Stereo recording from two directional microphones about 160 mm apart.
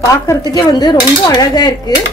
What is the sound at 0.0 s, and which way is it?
Dishes, 20° left (ahead or behind).